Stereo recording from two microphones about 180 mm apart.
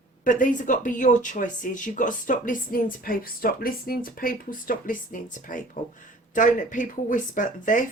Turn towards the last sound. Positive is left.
turn(degrees=45)  # may be behind; listen again after turning